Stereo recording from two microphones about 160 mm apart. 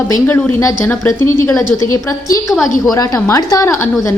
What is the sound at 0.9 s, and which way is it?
A woman's voice, 15° left (ahead or behind).